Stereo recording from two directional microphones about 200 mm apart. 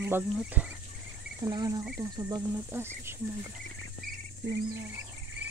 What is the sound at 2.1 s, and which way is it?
Cricket, 15° right (ahead or behind).